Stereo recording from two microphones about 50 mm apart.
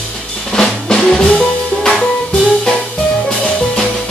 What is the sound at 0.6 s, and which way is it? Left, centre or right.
Drum, centre.